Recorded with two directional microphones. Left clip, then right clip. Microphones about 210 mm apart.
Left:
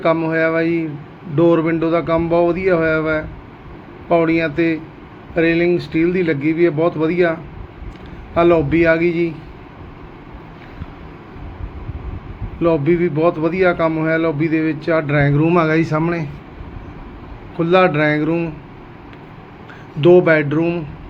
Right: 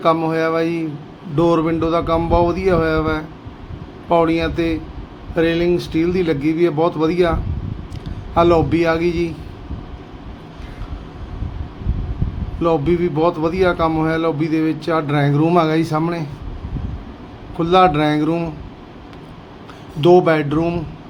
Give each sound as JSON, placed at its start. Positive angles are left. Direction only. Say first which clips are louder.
{"t": 0.0, "sound": "speech", "louder": "even", "side_deg": -20}
{"t": 8.4, "sound": "speech", "louder": "left 1 dB", "side_deg": -20}
{"t": 12.6, "sound": "speech", "louder": "left 1 dB", "side_deg": -20}
{"t": 17.6, "sound": "speech", "louder": "even", "side_deg": -15}
{"t": 20.0, "sound": "speech", "louder": "left 1 dB", "side_deg": -20}